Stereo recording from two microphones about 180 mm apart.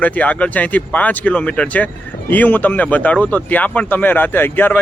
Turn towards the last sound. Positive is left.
turn(degrees=10)  # may be behind; listen again after turning